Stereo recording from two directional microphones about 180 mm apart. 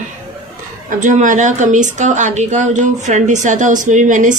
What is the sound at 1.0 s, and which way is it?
Speech, 45° right (ahead or behind).